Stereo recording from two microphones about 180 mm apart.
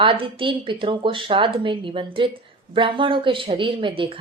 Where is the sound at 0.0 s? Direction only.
30° right (ahead or behind).